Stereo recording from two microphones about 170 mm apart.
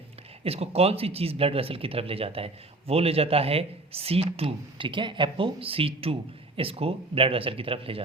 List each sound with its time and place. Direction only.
0.4 s speech: 35° right (ahead or behind)